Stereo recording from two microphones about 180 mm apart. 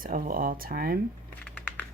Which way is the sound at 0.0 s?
50° right (ahead or behind).